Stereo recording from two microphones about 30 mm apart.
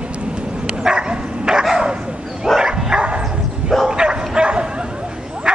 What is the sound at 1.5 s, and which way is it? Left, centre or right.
Dog, right.